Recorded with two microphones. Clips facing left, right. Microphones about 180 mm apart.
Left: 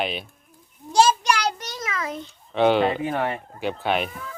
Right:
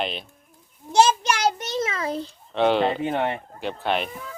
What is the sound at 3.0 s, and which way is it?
Speech, 25° right (ahead or behind).